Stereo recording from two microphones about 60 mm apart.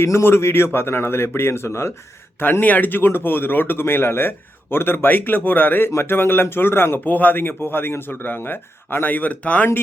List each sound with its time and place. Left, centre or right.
0.0 s speech: left
2.4 s speech: left